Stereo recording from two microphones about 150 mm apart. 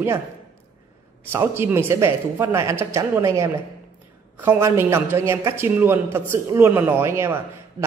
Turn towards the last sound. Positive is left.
turn(degrees=-15)  # may be behind; listen again after turning